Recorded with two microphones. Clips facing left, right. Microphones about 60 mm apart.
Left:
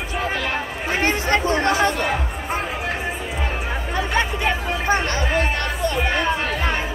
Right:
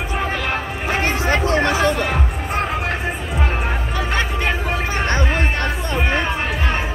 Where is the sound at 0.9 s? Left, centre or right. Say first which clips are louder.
Even; centre.